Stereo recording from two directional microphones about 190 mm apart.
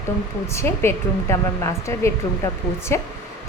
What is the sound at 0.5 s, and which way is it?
A woman's voice, 10° left (ahead or behind).